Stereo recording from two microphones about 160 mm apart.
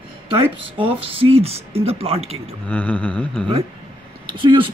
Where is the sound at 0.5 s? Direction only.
35° right (ahead or behind).